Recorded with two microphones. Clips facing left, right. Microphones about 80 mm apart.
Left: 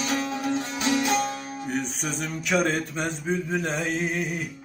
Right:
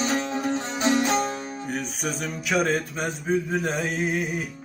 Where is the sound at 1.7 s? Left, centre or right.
Centre.